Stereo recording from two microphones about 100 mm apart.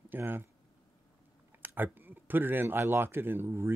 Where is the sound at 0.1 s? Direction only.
20° right (ahead or behind).